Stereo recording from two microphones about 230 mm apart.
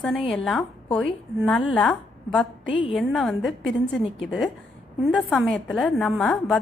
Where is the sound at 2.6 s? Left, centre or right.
Left.